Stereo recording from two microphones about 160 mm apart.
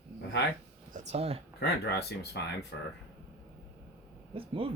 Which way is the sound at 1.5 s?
90° left.